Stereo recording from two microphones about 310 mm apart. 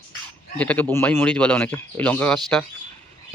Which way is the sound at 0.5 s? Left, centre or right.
Centre.